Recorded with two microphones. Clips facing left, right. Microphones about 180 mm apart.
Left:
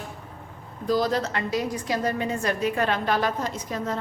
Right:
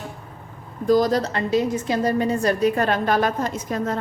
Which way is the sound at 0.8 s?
45° right (ahead or behind).